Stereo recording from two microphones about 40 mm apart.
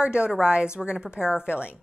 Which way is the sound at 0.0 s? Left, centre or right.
Right.